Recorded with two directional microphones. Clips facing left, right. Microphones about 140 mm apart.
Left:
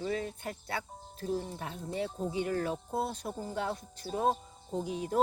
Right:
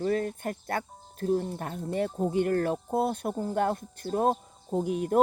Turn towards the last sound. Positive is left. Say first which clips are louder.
# right 6 dB
turn(degrees=-50)  # may be behind; listen again after turning